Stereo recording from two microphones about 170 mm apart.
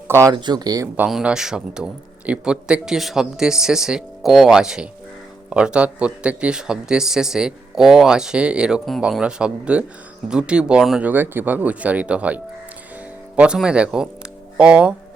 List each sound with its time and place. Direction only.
0.1 s speech: 15° right (ahead or behind)
0.9 s a man's voice: 5° right (ahead or behind)